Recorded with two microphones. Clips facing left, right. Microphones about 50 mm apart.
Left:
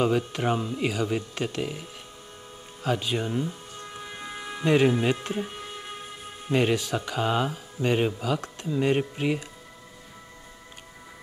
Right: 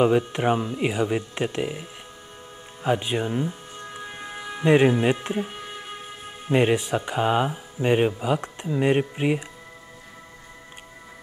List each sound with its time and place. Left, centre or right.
0.0 s speech: right
2.8 s music: right
4.6 s speech: right